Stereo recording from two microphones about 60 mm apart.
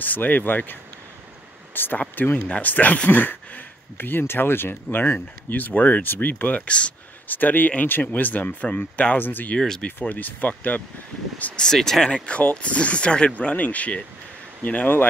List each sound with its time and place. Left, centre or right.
0.0 s speech: left
1.7 s a sound: left
2.1 s speech: left
9.5 s speech: centre
9.8 s speech: left
11.6 s speech: centre
12.3 s speech: left